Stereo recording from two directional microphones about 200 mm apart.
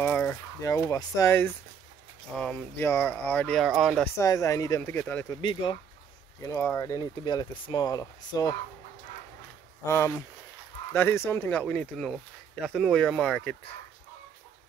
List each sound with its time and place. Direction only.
0.0 s a sound: 10° left (ahead or behind)
0.7 s speech: 15° left (ahead or behind); by 4.0 s centre (ahead or behind)
4.0 s speech: 15° left (ahead or behind)
5.4 s speech: 25° left (ahead or behind)
6.4 s speech: 15° left (ahead or behind)
9.8 s speech: 10° left (ahead or behind)